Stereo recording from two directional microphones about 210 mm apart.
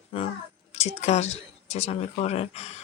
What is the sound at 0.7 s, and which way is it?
Speech, 30° left (ahead or behind).